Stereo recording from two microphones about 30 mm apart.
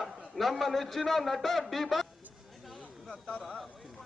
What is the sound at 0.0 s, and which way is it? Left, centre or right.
A man's voice, centre.